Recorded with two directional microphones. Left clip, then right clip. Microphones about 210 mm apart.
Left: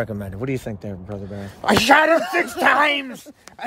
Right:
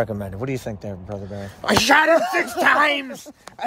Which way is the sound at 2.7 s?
15° left (ahead or behind).